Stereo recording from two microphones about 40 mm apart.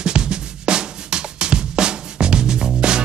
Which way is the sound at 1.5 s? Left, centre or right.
Right.